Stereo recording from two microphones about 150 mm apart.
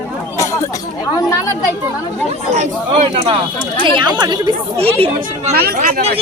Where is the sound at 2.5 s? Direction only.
50° right (ahead or behind).